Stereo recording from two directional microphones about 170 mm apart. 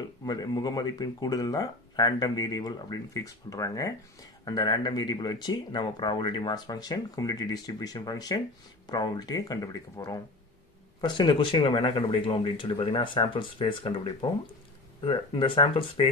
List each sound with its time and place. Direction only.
0.2 s speech: 25° left (ahead or behind)